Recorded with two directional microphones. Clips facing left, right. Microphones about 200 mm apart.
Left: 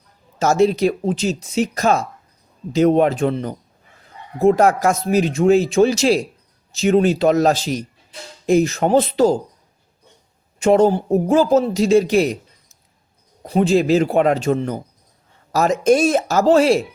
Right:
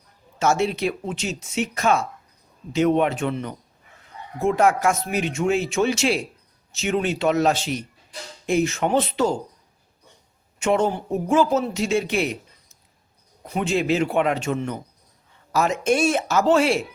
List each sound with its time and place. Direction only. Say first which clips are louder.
0.3 s speech: left 6 dB; 35° left (ahead or behind)
10.6 s speech: left 7 dB; 35° left (ahead or behind)
13.4 s speech: left 7 dB; 35° left (ahead or behind)